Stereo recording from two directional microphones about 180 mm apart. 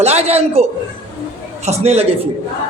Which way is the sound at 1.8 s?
35° right (ahead or behind).